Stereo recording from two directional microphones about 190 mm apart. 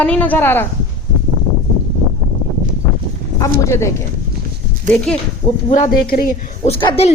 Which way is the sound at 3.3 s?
15° left (ahead or behind).